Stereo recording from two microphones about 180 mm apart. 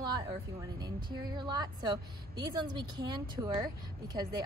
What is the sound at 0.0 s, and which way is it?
A woman's voice, 20° right (ahead or behind).